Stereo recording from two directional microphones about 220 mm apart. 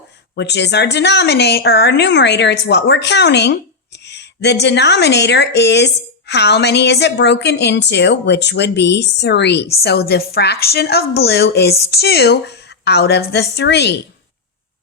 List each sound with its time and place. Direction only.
0.3 s a woman's voice: 50° left (ahead or behind)
4.0 s a sound: 50° left (ahead or behind)
4.6 s a woman's voice: 50° left (ahead or behind)